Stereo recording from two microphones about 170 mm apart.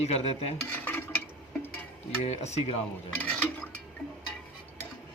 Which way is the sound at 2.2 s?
40° left (ahead or behind).